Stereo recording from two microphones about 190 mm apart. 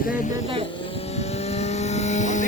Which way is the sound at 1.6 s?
35° left (ahead or behind).